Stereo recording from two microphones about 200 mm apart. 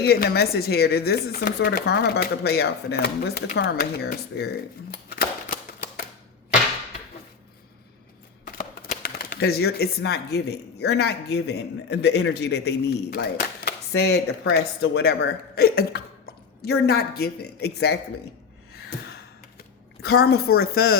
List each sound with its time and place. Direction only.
0.0 s speech: 55° left (ahead or behind)
9.0 s speech: 50° left (ahead or behind)
20.1 s speech: 55° left (ahead or behind)